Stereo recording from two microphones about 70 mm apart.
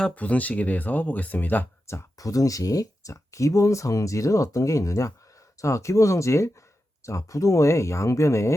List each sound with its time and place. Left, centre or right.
0.2 s speech: left
2.1 s speech: left